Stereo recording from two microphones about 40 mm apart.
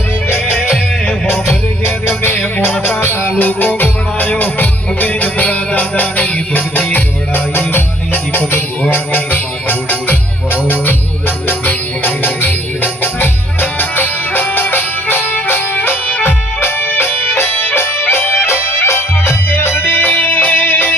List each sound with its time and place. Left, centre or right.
0.7 s music: left
2.0 s music: left
3.0 s music: left
3.2 s music: left
16.2 s music: left
19.8 s music: left